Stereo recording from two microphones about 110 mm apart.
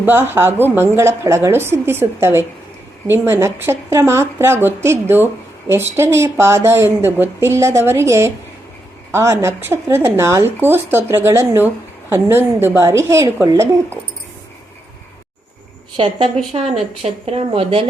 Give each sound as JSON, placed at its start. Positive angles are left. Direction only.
{"t": 0.0, "sound": "speech", "side_deg": -20}
{"t": 16.0, "sound": "speech", "side_deg": -55}